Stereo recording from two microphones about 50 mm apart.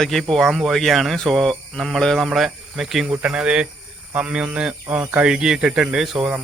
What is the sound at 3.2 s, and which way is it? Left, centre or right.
Speech, right.